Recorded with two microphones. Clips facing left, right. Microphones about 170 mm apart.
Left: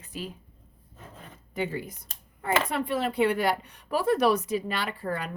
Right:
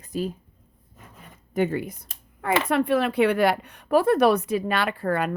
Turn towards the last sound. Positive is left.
turn(degrees=-60)  # may be behind; listen again after turning